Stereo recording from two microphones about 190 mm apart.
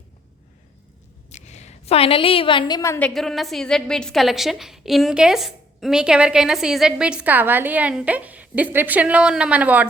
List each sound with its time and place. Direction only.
1.3 s a woman's voice: 35° left (ahead or behind); by 3.1 s 15° left (ahead or behind)
3.1 s a woman's voice: centre (ahead or behind)